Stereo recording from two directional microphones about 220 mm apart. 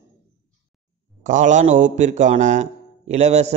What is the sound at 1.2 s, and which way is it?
A man's voice, 35° right (ahead or behind).